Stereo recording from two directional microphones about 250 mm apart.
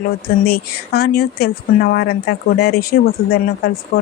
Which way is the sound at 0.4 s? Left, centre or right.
Left.